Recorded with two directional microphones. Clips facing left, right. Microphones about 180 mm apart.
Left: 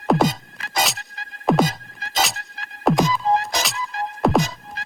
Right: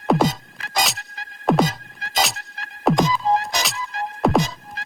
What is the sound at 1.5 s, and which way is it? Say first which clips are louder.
Music: even; centre (ahead or behind).